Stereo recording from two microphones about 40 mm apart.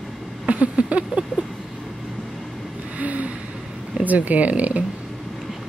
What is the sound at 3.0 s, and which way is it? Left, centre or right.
Speech, right.